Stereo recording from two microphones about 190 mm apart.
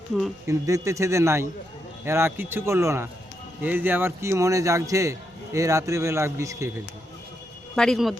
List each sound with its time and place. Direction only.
0.4 s speech: 15° right (ahead or behind)
7.8 s speech: centre (ahead or behind)